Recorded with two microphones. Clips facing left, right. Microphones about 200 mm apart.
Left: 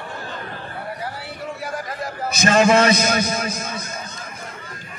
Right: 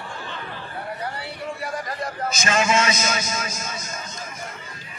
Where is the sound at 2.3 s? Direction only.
60° left (ahead or behind).